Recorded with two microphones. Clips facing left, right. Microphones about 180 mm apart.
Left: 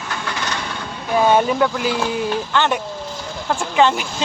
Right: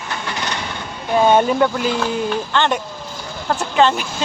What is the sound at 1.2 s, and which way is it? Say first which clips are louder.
Speech: right 1 dB; 5° left (ahead or behind).